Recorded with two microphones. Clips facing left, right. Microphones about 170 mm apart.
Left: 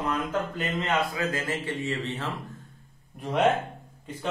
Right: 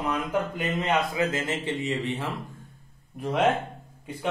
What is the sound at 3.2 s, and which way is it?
Speech, centre (ahead or behind).